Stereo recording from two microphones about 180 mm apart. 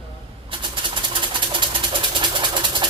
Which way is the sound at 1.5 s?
30° right (ahead or behind).